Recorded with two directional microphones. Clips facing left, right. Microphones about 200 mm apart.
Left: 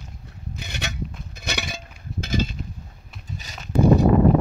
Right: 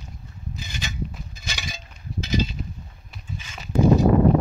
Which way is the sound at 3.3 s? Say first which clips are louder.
Even; 40° left (ahead or behind).